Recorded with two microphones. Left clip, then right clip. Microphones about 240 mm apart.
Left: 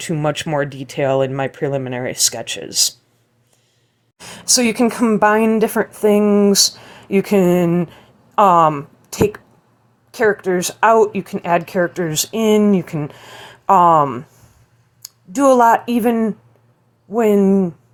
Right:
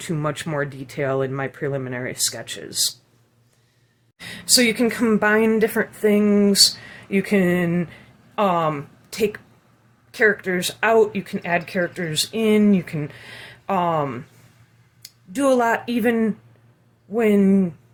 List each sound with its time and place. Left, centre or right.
0.0 s speech: centre
4.2 s speech: left
10.4 s speech: centre
17.4 s speech: centre